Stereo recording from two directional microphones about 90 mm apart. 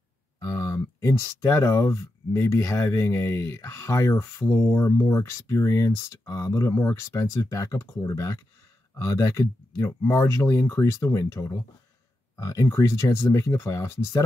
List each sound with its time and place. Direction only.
0.4 s speech: 40° left (ahead or behind)